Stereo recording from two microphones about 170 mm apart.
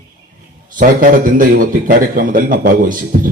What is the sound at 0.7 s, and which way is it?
A man's voice, 55° right (ahead or behind).